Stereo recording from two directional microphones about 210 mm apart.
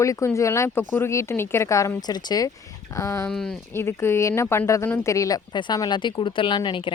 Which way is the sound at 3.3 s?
5° left (ahead or behind).